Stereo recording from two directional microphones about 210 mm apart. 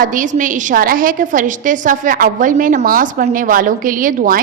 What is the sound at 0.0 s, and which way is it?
A woman's voice, 40° right (ahead or behind).